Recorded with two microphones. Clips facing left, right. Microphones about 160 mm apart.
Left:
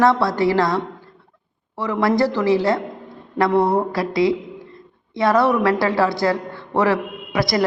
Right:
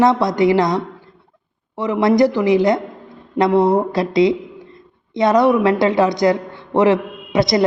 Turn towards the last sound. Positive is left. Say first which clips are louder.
# right 4 dB
turn(degrees=-20)  # may be behind; listen again after turning